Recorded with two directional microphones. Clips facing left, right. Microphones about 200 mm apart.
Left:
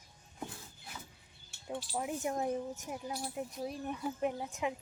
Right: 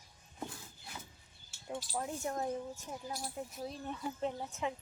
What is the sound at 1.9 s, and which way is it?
Speech, 15° left (ahead or behind).